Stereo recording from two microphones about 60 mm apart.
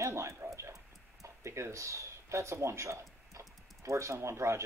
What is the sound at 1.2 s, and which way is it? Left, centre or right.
Speech, right.